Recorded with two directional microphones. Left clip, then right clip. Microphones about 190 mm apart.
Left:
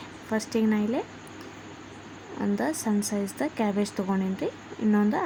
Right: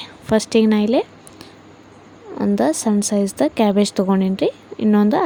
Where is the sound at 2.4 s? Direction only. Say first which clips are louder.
Right 10 dB; 35° right (ahead or behind).